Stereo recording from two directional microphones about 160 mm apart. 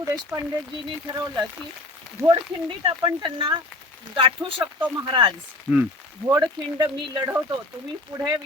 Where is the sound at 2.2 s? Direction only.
15° right (ahead or behind).